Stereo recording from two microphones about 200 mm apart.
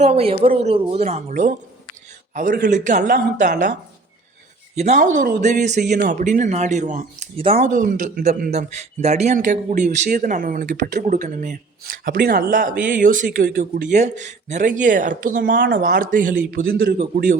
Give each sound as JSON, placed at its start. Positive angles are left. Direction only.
{"t": 0.0, "sound": "speech", "side_deg": -30}